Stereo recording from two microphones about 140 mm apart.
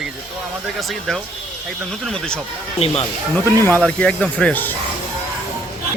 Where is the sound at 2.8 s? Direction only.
45° left (ahead or behind).